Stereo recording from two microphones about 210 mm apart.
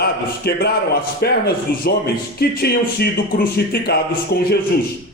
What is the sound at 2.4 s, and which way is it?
Speech, 50° left (ahead or behind).